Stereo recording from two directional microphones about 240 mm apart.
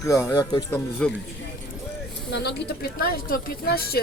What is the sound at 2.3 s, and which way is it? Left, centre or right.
Speech, left.